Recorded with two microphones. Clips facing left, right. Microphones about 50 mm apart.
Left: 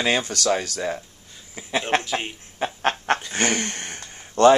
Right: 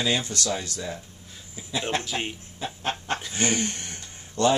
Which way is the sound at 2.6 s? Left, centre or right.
Left.